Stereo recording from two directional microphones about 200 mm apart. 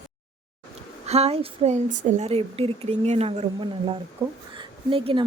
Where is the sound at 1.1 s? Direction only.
30° right (ahead or behind).